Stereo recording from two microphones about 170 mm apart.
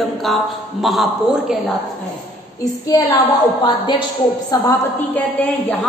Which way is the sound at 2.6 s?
20° left (ahead or behind).